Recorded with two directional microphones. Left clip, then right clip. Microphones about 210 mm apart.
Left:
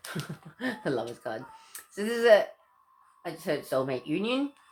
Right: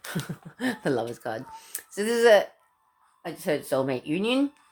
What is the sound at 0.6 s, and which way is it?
Speech, 40° right (ahead or behind).